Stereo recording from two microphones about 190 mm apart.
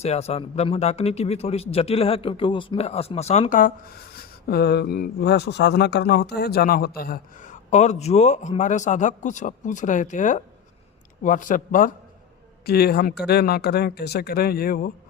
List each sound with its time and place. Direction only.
0.0 s speech: 35° left (ahead or behind)
4.2 s speech: 55° left (ahead or behind)
12.6 s speech: 55° left (ahead or behind)